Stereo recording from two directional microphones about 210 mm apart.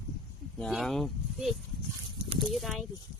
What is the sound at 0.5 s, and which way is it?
Speech, centre (ahead or behind).